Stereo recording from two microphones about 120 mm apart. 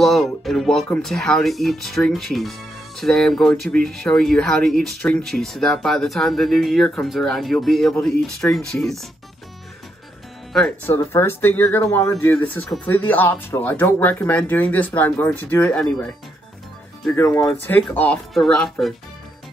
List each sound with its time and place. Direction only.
0.0 s speech: centre (ahead or behind)
10.9 s speech: 20° left (ahead or behind)
17.1 s speech: 20° left (ahead or behind); by 18.9 s 5° left (ahead or behind)